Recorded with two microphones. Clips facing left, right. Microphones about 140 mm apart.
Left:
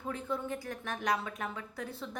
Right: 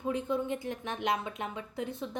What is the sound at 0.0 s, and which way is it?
A woman's voice, 20° right (ahead or behind).